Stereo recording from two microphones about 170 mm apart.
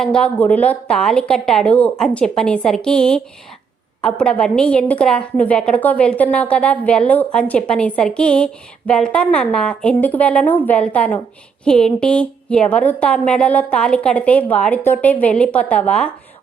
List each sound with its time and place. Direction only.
0.0 s a woman's voice: 5° left (ahead or behind)